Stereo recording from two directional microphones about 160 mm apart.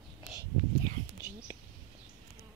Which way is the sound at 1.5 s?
15° right (ahead or behind).